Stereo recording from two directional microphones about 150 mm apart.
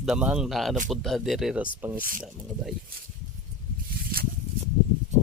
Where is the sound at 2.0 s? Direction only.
70° right (ahead or behind).